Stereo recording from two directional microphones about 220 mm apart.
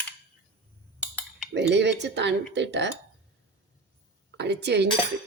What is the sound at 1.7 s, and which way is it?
Speech, 50° right (ahead or behind).